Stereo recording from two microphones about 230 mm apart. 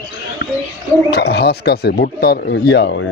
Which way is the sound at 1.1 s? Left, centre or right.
Left.